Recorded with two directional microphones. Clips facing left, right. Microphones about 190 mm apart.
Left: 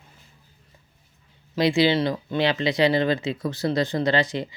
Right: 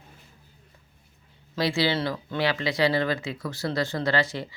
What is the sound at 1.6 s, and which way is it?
Speech, 20° left (ahead or behind).